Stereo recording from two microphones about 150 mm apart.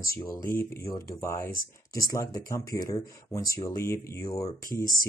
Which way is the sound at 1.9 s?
25° left (ahead or behind).